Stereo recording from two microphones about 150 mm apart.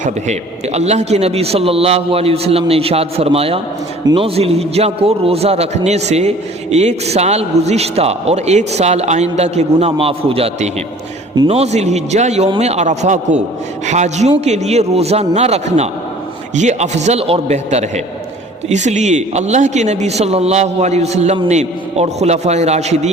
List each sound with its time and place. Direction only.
0.0 s a man's voice: 50° right (ahead or behind)